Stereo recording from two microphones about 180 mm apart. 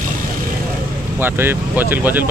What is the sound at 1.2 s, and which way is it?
Speech, 10° right (ahead or behind).